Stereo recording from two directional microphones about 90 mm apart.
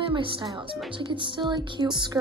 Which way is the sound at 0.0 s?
75° right (ahead or behind).